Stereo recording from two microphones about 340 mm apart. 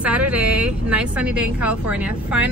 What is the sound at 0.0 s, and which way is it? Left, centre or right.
A woman's voice, centre.